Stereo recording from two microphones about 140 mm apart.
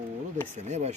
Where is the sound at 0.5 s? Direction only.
55° right (ahead or behind).